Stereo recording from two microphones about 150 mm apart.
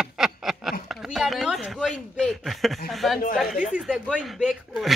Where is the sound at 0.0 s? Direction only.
5° right (ahead or behind).